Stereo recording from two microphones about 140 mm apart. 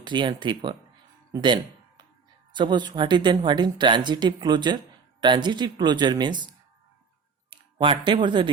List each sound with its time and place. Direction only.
0.0 s a woman's voice: 35° right (ahead or behind)
2.6 s a woman's voice: 35° right (ahead or behind)
7.5 s speech: 35° right (ahead or behind)